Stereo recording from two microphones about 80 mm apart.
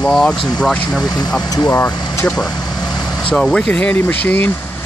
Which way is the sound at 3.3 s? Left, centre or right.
Centre.